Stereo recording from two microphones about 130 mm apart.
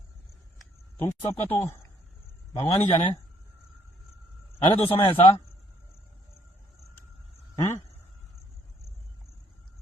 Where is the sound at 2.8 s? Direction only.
55° left (ahead or behind).